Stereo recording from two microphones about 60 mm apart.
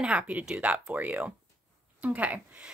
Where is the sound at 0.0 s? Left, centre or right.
Centre.